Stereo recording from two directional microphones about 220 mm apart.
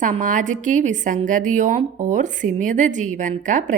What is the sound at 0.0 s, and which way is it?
A woman's voice, 35° right (ahead or behind).